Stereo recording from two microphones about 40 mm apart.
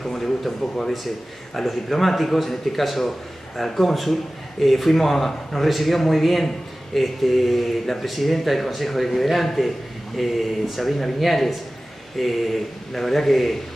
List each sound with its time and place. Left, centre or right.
0.0 s speech: centre